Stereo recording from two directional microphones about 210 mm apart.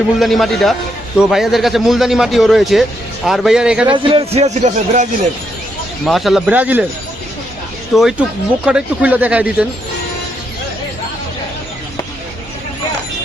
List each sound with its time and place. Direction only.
0.2 s a man's voice: centre (ahead or behind)
3.8 s a man's voice: 25° right (ahead or behind)
6.1 s a man's voice: centre (ahead or behind)
7.9 s a man's voice: centre (ahead or behind)